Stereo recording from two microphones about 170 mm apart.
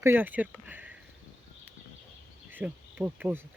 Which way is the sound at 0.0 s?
10° right (ahead or behind).